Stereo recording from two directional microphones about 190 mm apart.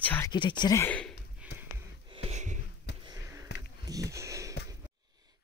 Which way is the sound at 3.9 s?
15° right (ahead or behind).